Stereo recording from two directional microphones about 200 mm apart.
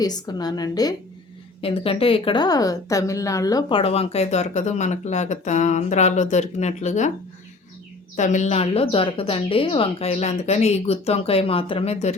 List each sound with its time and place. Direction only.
0.0 s a woman's voice: 20° left (ahead or behind); by 7.1 s 35° left (ahead or behind)
8.1 s a woman's voice: 35° left (ahead or behind)